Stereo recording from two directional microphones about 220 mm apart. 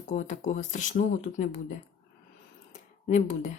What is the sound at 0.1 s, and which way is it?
Speech, 35° left (ahead or behind).